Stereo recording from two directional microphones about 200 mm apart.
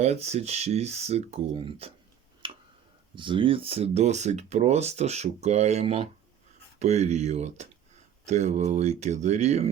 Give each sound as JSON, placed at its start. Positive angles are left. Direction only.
{"t": 0.0, "sound": "speech", "side_deg": -35}
{"t": 2.4, "sound": "tick-tock", "side_deg": -25}
{"t": 3.2, "sound": "speech", "side_deg": -25}